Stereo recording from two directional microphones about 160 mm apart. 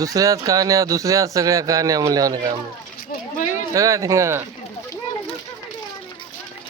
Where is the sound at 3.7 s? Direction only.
20° right (ahead or behind).